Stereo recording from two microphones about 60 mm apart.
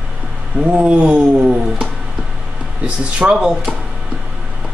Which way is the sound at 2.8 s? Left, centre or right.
Centre.